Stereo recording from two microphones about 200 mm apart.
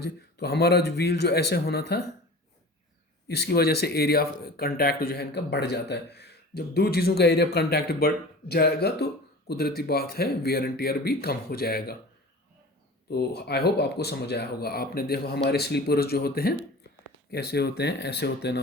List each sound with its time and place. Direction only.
0.0 s speech: 55° left (ahead or behind)
3.2 s speech: 55° left (ahead or behind)
13.1 s speech: 55° left (ahead or behind)